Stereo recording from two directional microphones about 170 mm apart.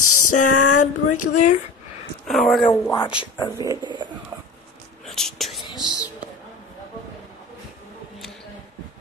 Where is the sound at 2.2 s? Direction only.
Centre (ahead or behind).